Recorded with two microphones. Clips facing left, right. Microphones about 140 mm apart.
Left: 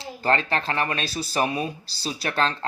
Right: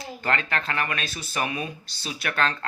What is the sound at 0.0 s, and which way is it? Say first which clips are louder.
Speech: left 4 dB; 35° left (ahead or behind).